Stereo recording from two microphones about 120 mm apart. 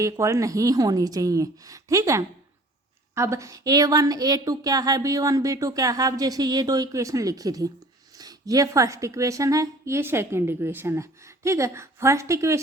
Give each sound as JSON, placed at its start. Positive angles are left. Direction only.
{"t": 0.0, "sound": "a woman's voice", "side_deg": -25}